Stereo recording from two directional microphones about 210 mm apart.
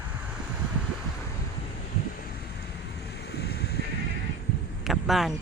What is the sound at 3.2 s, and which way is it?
Boat, 50° left (ahead or behind).